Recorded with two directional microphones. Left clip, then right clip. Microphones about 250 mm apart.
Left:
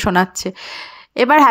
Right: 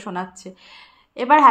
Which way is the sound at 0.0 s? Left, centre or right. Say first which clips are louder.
Left 13 dB; left.